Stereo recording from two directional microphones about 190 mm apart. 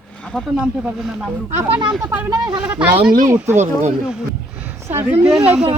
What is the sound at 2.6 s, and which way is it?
Speech, 5° right (ahead or behind).